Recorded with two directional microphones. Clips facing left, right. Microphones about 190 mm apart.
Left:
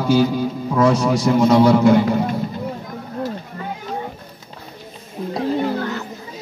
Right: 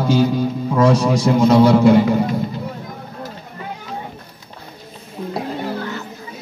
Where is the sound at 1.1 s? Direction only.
5° right (ahead or behind).